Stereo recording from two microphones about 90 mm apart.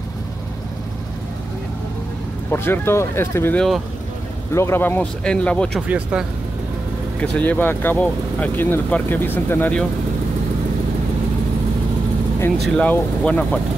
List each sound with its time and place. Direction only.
2.5 s speech: 25° left (ahead or behind)
3.5 s speech: centre (ahead or behind)
4.6 s speech: 30° left (ahead or behind)
5.2 s speech: 10° left (ahead or behind)
5.9 s speech: 15° right (ahead or behind)
7.2 s speech: 20° left (ahead or behind)
12.7 s speech: 15° left (ahead or behind)